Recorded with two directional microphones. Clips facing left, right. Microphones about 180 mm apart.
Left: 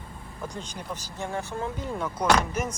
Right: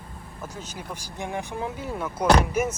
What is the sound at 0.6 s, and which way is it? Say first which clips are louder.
Speech: left 1 dB; 5° right (ahead or behind).